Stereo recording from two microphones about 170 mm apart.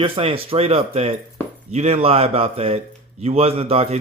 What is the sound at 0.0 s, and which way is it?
A man's voice, 35° right (ahead or behind).